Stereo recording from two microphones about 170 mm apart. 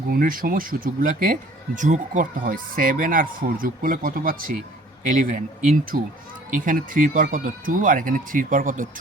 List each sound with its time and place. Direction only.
0.1 s speech: 55° right (ahead or behind)